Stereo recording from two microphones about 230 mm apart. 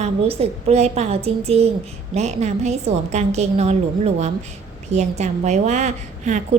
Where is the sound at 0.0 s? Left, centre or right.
Right.